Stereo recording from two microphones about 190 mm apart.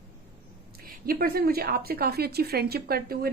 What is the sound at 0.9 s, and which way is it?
A woman's voice, 50° right (ahead or behind).